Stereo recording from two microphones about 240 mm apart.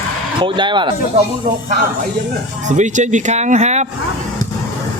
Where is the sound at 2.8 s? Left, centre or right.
Right.